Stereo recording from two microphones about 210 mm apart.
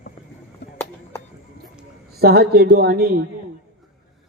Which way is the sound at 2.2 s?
50° right (ahead or behind).